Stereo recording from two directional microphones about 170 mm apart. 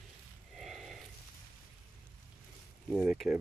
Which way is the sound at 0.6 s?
Centre (ahead or behind).